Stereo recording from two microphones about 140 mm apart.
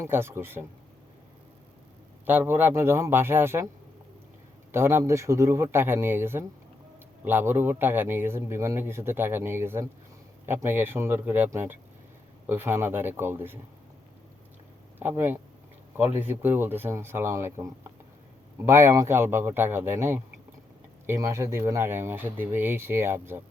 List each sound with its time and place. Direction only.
0.0 s a man's voice: 15° right (ahead or behind)
2.2 s a man's voice: 15° right (ahead or behind)
4.7 s a man's voice: 20° right (ahead or behind)
14.9 s a man's voice: 15° right (ahead or behind)